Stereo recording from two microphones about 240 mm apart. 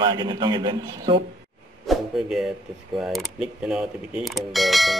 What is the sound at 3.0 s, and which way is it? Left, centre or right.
Mechanisms, centre.